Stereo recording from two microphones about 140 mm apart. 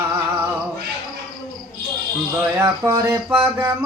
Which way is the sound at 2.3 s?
20° right (ahead or behind).